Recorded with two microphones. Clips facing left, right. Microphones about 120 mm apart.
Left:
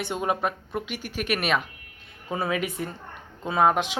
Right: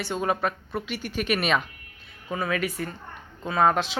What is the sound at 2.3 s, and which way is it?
A woman's voice, 20° left (ahead or behind).